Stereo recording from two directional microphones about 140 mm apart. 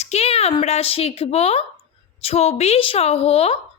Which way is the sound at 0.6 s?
45° left (ahead or behind).